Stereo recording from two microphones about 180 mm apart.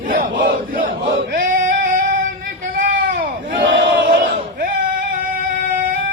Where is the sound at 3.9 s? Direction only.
55° right (ahead or behind).